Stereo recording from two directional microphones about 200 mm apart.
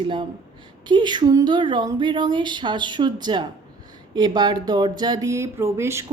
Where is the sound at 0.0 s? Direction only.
25° right (ahead or behind).